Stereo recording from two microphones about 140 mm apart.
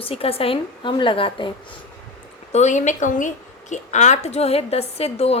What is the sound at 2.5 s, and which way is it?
A woman's voice, 60° left (ahead or behind).